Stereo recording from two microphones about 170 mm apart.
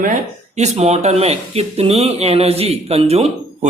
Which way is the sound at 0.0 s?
45° right (ahead or behind).